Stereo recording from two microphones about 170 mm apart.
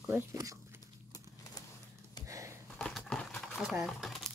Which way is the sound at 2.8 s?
5° left (ahead or behind).